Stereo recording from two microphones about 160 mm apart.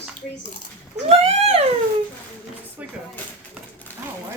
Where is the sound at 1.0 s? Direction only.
40° right (ahead or behind).